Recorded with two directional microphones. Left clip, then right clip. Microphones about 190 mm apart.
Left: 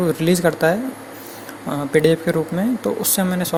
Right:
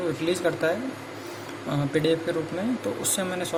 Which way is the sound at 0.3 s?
35° left (ahead or behind).